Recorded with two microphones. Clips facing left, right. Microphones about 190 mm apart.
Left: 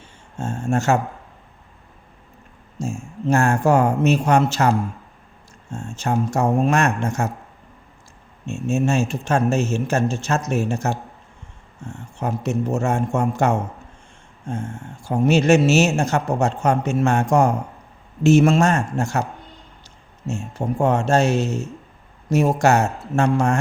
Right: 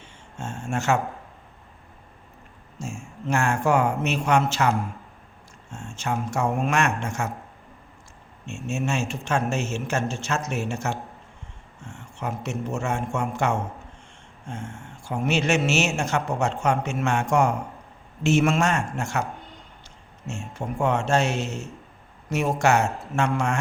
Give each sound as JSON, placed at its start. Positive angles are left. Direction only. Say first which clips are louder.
{"t": 0.0, "sound": "a sound", "louder": "left 6 dB", "side_deg": 35}
{"t": 2.7, "sound": "a man's voice", "louder": "left 7 dB", "side_deg": 35}
{"t": 8.4, "sound": "a man's voice", "louder": "left 7 dB", "side_deg": 35}